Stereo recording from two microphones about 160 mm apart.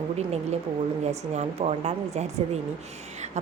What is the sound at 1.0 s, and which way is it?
Speech, 45° right (ahead or behind).